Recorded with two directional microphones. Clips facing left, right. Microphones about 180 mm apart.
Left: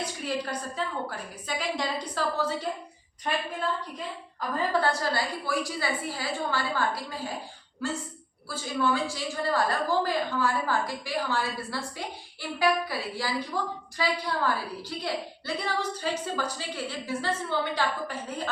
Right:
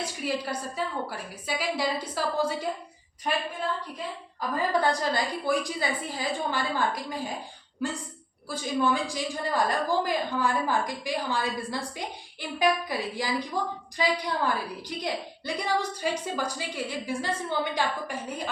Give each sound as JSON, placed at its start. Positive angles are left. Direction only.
{"t": 0.0, "sound": "a woman's voice", "side_deg": -10}
{"t": 4.7, "sound": "a woman's voice", "side_deg": -15}
{"t": 8.4, "sound": "a woman's voice", "side_deg": -15}